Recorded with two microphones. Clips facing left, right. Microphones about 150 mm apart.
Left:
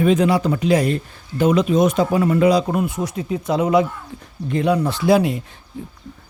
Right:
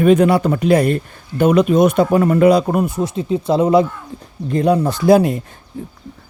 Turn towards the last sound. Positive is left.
turn(degrees=-45)  # may be behind; listen again after turning